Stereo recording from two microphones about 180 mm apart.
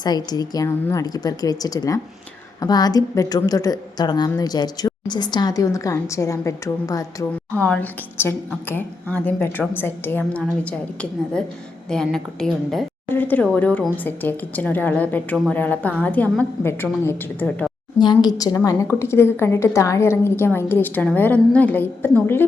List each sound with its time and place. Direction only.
0.3 s a woman's voice: 20° left (ahead or behind)
7.5 s a woman's voice: 5° left (ahead or behind)
18.0 s a woman's voice: 25° left (ahead or behind)